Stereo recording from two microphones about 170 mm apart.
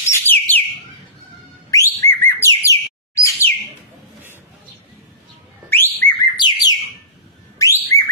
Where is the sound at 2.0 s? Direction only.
10° left (ahead or behind).